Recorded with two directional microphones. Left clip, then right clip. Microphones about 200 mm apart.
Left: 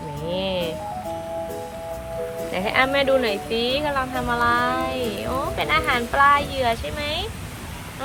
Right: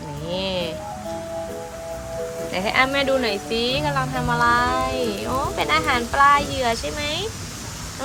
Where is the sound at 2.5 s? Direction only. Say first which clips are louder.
Even; 5° right (ahead or behind).